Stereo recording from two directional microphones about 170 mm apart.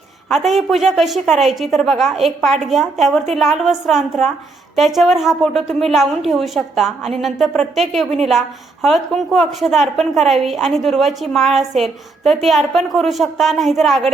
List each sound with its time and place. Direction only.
0.3 s a woman's voice: centre (ahead or behind)